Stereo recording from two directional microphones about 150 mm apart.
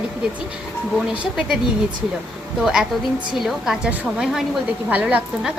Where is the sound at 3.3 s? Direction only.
Centre (ahead or behind).